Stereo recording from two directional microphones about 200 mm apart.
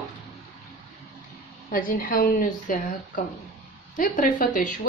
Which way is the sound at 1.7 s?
45° left (ahead or behind).